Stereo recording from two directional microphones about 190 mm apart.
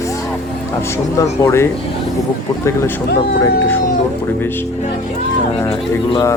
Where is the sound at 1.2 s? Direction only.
15° left (ahead or behind).